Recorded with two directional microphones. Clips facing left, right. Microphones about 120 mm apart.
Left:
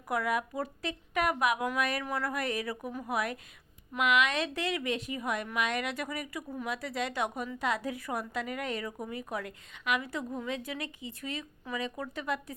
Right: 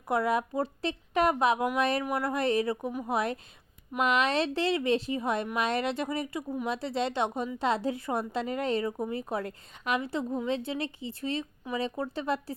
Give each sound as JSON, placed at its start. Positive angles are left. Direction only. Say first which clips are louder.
{"t": 0.1, "sound": "a woman's voice", "louder": "right 4 dB", "side_deg": -30}